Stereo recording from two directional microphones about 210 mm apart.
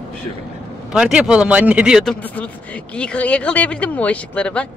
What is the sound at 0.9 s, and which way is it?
Speech, 5° right (ahead or behind).